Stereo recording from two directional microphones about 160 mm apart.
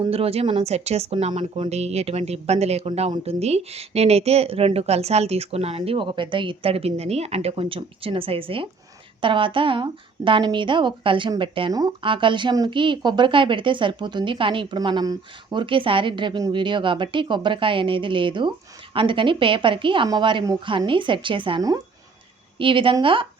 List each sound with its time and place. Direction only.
0.0 s a woman's voice: 35° right (ahead or behind)